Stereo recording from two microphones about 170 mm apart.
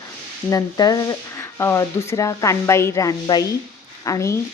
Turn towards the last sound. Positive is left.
turn(degrees=20)  # may be behind; listen again after turning